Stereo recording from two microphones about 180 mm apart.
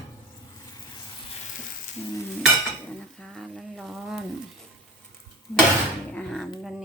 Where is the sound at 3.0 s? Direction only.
5° left (ahead or behind).